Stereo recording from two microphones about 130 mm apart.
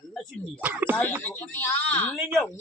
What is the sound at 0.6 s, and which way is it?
Speech, 10° right (ahead or behind).